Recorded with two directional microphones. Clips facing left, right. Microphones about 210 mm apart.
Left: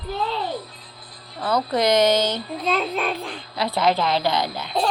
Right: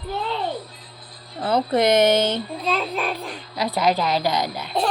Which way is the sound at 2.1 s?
55° right (ahead or behind).